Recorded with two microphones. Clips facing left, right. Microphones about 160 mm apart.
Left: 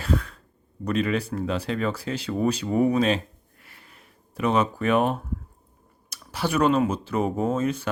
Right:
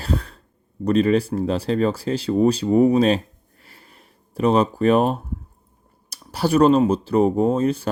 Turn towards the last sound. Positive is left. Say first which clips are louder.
# right 5 dB
turn(degrees=-35)  # may be behind; listen again after turning